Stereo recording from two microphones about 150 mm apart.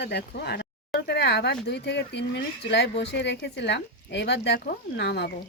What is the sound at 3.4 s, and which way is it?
Speech, 90° left.